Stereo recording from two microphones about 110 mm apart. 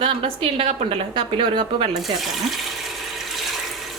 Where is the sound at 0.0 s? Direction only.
55° right (ahead or behind).